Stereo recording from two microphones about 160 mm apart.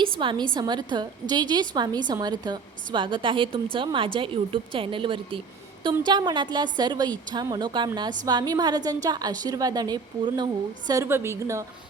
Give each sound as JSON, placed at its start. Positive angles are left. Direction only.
{"t": 0.2, "sound": "a woman's voice", "side_deg": -30}